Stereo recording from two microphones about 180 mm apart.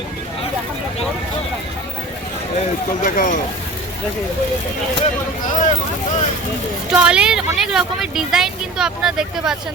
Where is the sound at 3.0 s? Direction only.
45° left (ahead or behind).